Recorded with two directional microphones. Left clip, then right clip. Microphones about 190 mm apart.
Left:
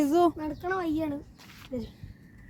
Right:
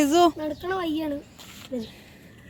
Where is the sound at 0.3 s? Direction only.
25° left (ahead or behind).